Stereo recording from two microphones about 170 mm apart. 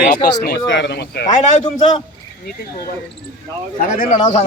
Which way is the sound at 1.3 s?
45° left (ahead or behind).